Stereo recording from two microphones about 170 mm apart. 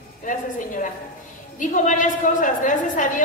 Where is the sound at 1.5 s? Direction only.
50° left (ahead or behind).